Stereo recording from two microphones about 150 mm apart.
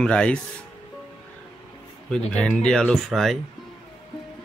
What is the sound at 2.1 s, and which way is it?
Speech, 5° left (ahead or behind).